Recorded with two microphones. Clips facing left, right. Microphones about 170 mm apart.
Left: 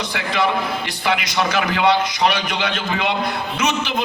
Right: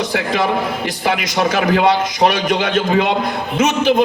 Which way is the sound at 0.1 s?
45° right (ahead or behind).